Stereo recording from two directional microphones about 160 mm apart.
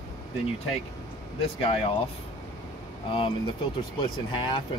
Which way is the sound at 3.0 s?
35° left (ahead or behind).